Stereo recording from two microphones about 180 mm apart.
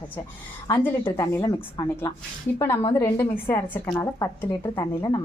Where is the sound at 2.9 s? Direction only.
10° left (ahead or behind).